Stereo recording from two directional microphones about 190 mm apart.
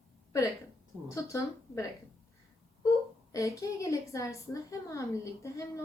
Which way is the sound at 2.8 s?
15° left (ahead or behind).